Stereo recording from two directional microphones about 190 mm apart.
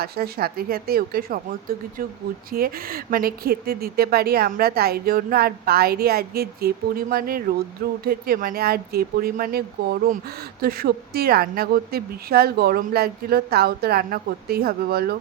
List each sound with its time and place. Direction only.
0.0 s speech: 55° right (ahead or behind)
2.5 s speech: 50° right (ahead or behind)